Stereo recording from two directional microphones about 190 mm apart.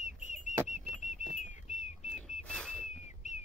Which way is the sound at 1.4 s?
40° left (ahead or behind).